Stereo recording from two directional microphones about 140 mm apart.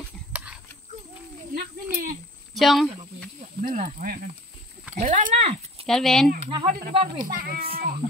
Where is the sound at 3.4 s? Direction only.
60° right (ahead or behind); by 4.3 s 90° right.